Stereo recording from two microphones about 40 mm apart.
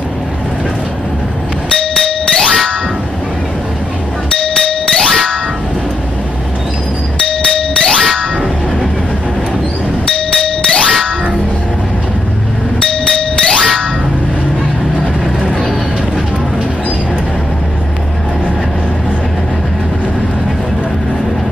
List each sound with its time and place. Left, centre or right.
2.0 s music: centre
4.4 s music: centre
5.0 s a sound: centre
7.2 s music: centre
10.0 s a sound: centre
10.8 s music: centre
12.8 s music: centre